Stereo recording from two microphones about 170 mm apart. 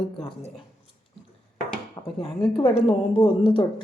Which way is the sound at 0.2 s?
35° left (ahead or behind).